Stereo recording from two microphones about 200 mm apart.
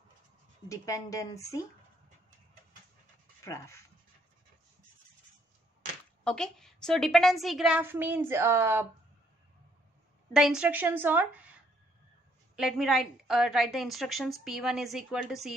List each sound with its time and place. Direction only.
0.7 s speech: 15° left (ahead or behind)
3.4 s speech: 15° left (ahead or behind)
6.2 s a woman's voice: 5° left (ahead or behind)
10.3 s a woman's voice: 5° right (ahead or behind)
12.5 s a woman's voice: centre (ahead or behind)